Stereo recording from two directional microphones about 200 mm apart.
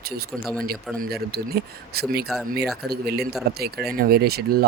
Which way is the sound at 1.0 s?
50° right (ahead or behind).